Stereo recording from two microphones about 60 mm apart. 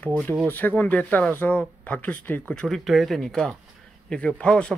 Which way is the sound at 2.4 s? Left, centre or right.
Centre.